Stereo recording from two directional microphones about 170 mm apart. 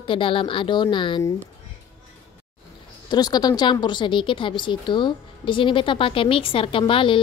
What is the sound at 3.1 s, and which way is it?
A woman's voice, 25° left (ahead or behind).